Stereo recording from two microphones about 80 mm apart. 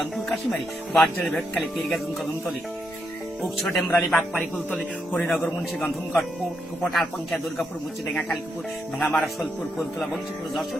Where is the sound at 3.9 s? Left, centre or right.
Centre.